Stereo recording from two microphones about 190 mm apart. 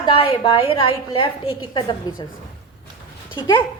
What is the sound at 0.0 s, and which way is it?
A woman's voice, 30° left (ahead or behind).